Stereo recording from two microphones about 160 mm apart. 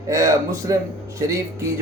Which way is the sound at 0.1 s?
20° right (ahead or behind).